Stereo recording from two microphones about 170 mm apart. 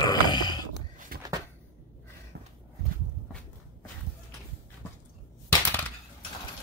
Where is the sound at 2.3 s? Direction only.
70° right (ahead or behind).